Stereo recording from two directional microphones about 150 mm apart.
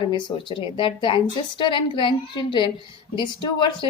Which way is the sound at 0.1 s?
35° left (ahead or behind).